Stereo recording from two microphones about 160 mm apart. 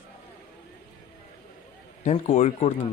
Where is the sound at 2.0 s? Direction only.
45° left (ahead or behind).